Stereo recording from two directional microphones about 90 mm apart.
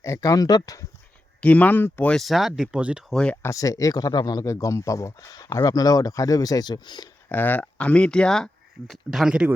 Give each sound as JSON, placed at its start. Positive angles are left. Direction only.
{"t": 0.0, "sound": "speech", "side_deg": 35}
{"t": 1.4, "sound": "speech", "side_deg": 15}
{"t": 2.1, "sound": "speech", "side_deg": 0}
{"t": 3.1, "sound": "speech", "side_deg": 10}
{"t": 3.4, "sound": "speech", "side_deg": 40}
{"t": 4.4, "sound": "speech", "side_deg": 35}
{"t": 7.3, "sound": "speech", "side_deg": 20}
{"t": 8.9, "sound": "speech", "side_deg": -5}